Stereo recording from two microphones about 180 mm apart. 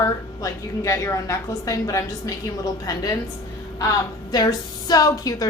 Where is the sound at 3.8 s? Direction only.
20° left (ahead or behind).